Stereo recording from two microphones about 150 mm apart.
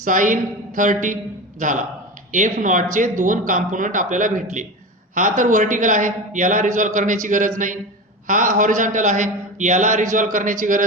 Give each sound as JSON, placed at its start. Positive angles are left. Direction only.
{"t": 0.0, "sound": "a man's voice", "side_deg": -60}